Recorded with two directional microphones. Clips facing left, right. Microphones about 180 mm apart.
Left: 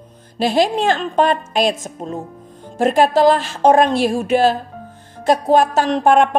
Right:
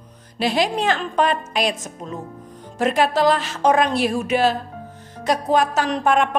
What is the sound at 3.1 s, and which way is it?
A woman's voice, 30° left (ahead or behind).